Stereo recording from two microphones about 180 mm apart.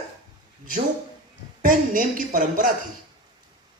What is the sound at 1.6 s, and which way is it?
Speech, 50° right (ahead or behind).